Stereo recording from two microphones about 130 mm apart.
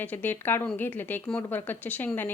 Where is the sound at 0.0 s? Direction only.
15° left (ahead or behind).